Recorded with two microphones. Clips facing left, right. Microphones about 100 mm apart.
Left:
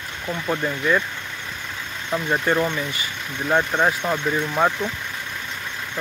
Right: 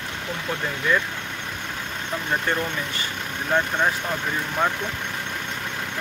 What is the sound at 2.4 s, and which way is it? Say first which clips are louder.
Speech: left 4 dB; 10° left (ahead or behind).